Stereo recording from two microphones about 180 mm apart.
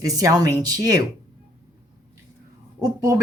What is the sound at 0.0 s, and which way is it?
A woman's voice, 20° right (ahead or behind).